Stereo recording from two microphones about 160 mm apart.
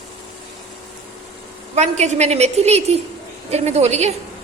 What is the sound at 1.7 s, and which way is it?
A woman's voice, 45° right (ahead or behind).